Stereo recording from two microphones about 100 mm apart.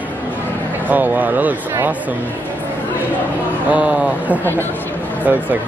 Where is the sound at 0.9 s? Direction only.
15° right (ahead or behind).